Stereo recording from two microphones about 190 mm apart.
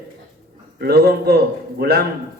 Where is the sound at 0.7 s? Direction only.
55° right (ahead or behind).